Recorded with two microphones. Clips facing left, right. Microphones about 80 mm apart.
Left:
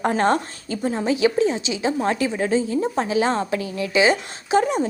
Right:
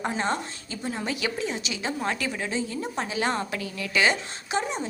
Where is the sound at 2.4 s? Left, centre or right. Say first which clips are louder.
Left 9 dB; left.